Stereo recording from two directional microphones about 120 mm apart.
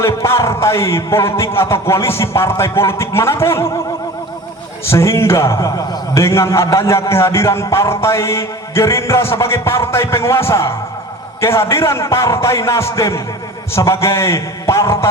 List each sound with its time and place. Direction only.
0.0 s a man's voice: 20° left (ahead or behind)
4.9 s a man's voice: 25° left (ahead or behind)